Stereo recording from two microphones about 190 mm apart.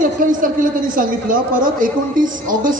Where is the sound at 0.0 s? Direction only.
45° right (ahead or behind).